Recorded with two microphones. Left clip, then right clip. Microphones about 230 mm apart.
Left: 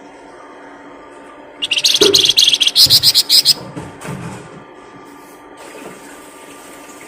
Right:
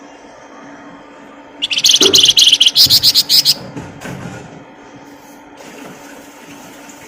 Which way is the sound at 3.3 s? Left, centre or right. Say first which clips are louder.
Even; centre.